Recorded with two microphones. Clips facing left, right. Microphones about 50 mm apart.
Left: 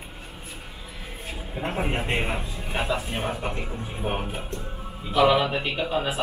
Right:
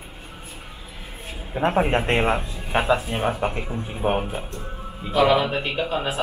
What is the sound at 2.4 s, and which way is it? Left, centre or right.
Speech, centre.